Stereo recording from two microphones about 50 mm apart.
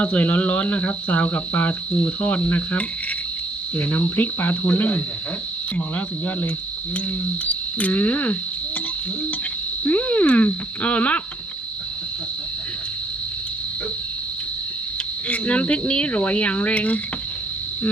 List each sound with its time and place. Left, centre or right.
0.0 s speech: left
7.4 s cricket: left
9.8 s speech: left
15.3 s speech: left